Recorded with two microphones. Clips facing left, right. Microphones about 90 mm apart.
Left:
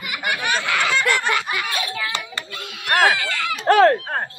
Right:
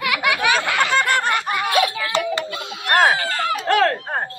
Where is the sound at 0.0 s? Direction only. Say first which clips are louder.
Right 5 dB; 70° right (ahead or behind).